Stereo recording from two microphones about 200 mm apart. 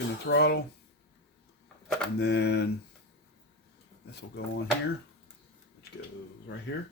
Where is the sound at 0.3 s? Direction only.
55° left (ahead or behind).